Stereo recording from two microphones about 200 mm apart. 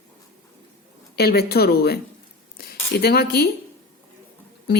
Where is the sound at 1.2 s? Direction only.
50° left (ahead or behind).